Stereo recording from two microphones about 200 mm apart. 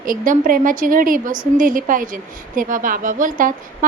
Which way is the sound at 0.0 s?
45° right (ahead or behind).